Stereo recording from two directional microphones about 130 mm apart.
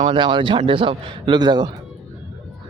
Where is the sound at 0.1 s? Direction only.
40° right (ahead or behind).